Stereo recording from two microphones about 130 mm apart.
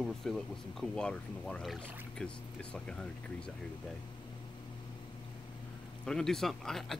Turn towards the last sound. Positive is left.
turn(degrees=5)  # may be behind; listen again after turning